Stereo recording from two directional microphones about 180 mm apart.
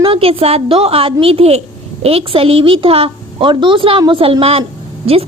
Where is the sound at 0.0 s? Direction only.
30° right (ahead or behind).